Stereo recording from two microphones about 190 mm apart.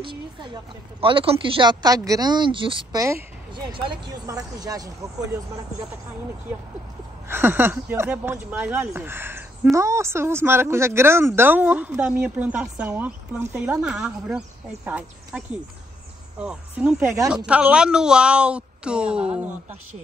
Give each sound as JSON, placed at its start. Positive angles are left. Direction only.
{"t": 0.0, "sound": "speech", "side_deg": -25}
{"t": 7.2, "sound": "a woman's voice", "side_deg": -10}